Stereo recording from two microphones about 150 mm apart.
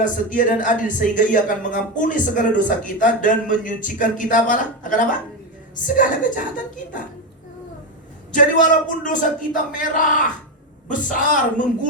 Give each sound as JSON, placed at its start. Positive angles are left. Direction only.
{"t": 0.0, "sound": "speech", "side_deg": 60}
{"t": 8.3, "sound": "speech", "side_deg": 60}